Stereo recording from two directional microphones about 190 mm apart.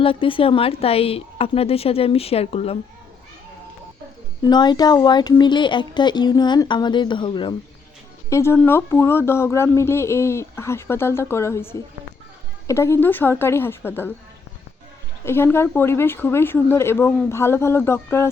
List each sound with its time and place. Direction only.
0.0 s speech: 30° left (ahead or behind)
4.4 s speech: 20° left (ahead or behind)
8.3 s speech: 15° left (ahead or behind)
15.2 s speech: 10° left (ahead or behind)